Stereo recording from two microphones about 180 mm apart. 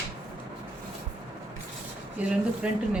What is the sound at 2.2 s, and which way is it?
Speech, 5° right (ahead or behind).